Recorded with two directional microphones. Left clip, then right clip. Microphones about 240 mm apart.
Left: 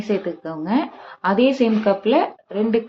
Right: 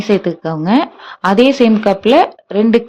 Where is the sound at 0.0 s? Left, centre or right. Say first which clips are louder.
Right 9 dB; right.